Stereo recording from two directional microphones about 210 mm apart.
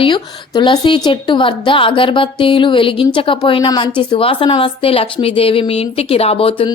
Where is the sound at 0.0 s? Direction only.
20° left (ahead or behind).